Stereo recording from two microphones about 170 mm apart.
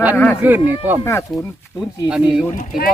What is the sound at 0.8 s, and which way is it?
Speech, 10° right (ahead or behind).